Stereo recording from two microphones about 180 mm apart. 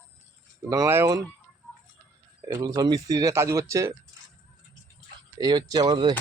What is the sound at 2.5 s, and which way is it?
Speech, 20° right (ahead or behind).